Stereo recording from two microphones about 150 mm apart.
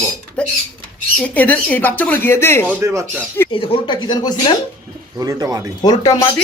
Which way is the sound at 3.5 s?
35° left (ahead or behind).